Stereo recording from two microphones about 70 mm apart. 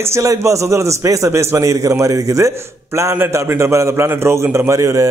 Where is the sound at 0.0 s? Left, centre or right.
Right.